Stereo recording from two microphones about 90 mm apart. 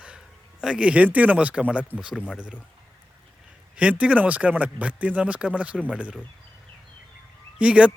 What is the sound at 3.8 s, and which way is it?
A man's voice, 15° right (ahead or behind).